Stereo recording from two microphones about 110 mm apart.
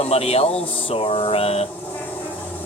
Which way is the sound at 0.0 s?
65° left (ahead or behind).